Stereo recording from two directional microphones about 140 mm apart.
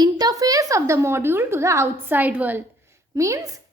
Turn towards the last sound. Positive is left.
turn(degrees=-20)  # may be behind; listen again after turning